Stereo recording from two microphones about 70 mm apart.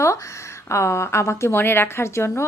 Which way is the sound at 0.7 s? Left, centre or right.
Left.